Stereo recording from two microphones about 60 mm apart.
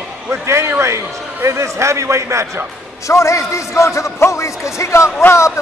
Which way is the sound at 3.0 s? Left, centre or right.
Left.